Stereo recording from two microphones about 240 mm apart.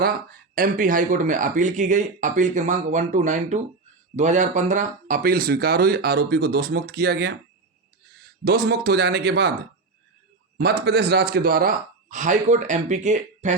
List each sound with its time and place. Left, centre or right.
0.0 s speech: right
8.4 s speech: right
10.6 s speech: right